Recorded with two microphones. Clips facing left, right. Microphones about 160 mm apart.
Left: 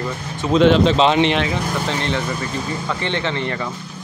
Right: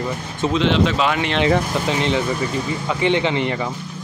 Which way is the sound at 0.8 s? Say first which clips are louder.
Left 5 dB; 25° left (ahead or behind).